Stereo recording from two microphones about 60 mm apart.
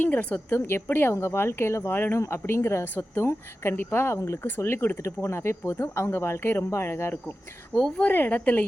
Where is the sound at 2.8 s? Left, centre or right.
Left.